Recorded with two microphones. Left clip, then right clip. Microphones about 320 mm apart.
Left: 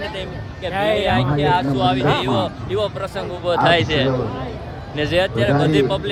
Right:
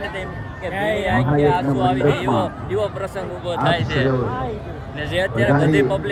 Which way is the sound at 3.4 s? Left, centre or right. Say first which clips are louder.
Left 5 dB; left.